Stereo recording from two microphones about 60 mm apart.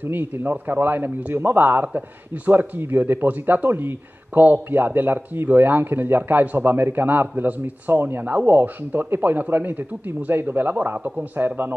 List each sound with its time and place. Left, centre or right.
0.0 s speech: right